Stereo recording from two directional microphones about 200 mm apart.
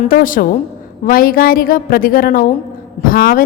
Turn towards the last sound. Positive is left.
turn(degrees=45)  # may be behind; listen again after turning